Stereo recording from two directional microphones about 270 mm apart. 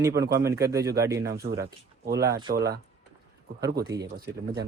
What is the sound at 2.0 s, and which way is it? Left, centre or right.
Speech, right.